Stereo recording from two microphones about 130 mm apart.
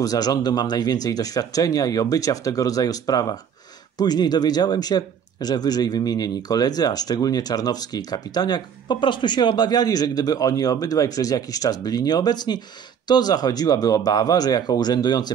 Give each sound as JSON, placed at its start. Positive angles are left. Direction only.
{"t": 0.0, "sound": "speech", "side_deg": 30}